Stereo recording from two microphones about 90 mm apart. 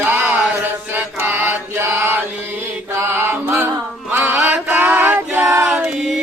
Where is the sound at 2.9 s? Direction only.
25° right (ahead or behind).